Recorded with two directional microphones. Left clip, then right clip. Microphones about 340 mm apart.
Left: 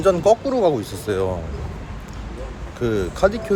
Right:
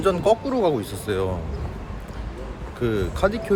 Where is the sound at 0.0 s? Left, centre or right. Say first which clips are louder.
Left 4 dB; centre.